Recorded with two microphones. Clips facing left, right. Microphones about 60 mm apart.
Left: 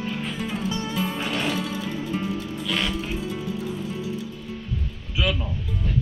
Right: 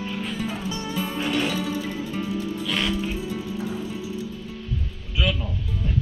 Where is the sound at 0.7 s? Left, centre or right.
Left.